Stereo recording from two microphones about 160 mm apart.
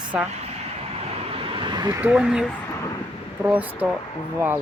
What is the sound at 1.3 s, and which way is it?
Vehicle, 35° right (ahead or behind).